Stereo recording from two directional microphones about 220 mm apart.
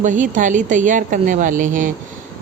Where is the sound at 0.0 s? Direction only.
35° right (ahead or behind).